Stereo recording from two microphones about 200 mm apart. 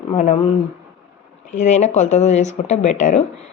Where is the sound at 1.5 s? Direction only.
35° left (ahead or behind).